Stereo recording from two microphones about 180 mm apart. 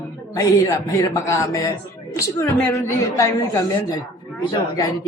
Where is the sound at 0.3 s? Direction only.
15° left (ahead or behind).